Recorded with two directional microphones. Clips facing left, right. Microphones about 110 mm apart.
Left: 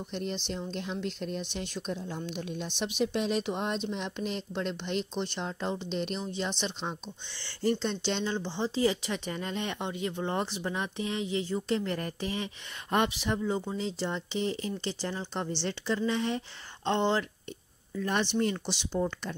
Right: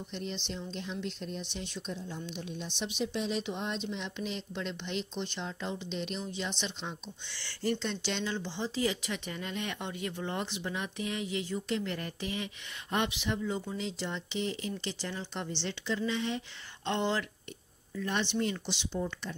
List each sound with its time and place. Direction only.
0.1 s speech: 50° left (ahead or behind)
7.2 s speech: 25° left (ahead or behind)
17.9 s speech: 45° left (ahead or behind)